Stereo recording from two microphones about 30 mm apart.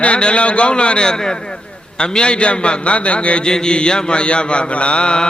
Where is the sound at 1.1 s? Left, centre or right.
Left.